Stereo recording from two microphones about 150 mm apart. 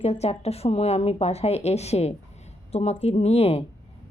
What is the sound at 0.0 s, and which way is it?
Speech, 45° left (ahead or behind).